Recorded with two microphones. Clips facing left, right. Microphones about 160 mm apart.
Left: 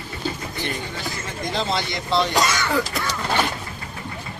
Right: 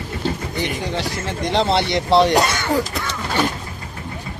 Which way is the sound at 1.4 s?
75° right (ahead or behind).